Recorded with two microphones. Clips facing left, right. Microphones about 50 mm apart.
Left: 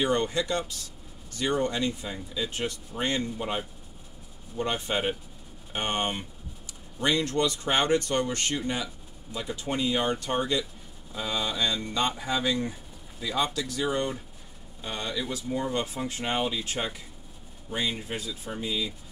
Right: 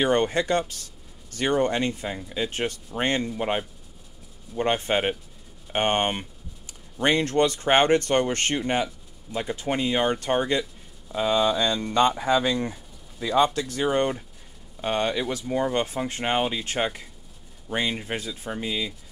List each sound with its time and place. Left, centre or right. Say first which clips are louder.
0.0 s speech: right 4 dB; right